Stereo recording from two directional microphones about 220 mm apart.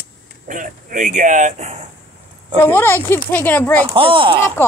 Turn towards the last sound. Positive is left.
turn(degrees=-25)  # may be behind; listen again after turning